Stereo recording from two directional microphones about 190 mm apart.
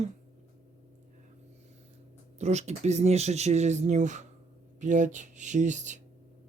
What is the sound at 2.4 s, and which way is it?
Speech, 35° right (ahead or behind).